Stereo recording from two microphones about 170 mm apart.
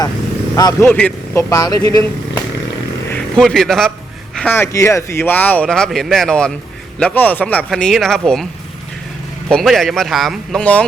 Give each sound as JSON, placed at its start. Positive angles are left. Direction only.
{"t": 0.5, "sound": "speech", "side_deg": 20}
{"t": 3.1, "sound": "a man's voice", "side_deg": 5}
{"t": 9.5, "sound": "speech", "side_deg": 0}